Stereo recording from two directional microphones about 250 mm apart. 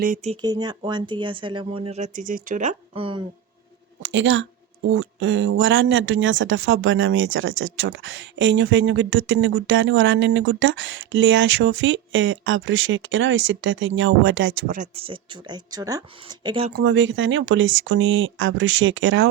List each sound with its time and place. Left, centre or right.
0.0 s speech: right
0.4 s speech: centre
4.0 s a woman's voice: right
14.7 s speech: right
16.7 s speech: right